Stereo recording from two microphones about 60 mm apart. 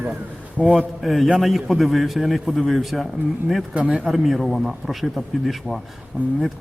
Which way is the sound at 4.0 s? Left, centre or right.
Centre.